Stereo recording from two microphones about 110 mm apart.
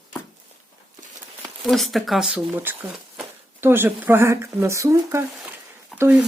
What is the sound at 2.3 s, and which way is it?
Speech, 20° right (ahead or behind).